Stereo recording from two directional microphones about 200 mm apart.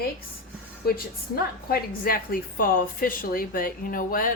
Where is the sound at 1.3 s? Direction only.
50° left (ahead or behind).